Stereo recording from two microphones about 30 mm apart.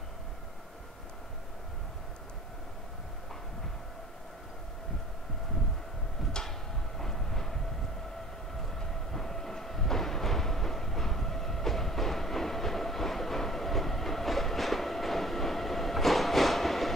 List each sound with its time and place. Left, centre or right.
6.4 s a sound: left
7.0 s train: centre
8.7 s train: centre